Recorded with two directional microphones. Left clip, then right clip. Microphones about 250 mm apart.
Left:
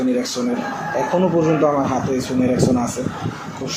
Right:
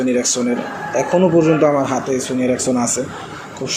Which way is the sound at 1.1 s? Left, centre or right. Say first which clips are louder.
Right 4 dB; right.